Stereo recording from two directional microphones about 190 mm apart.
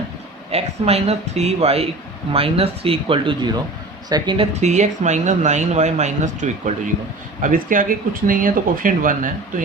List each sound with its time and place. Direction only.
0.5 s speech: 30° right (ahead or behind)
4.6 s speech: 40° right (ahead or behind)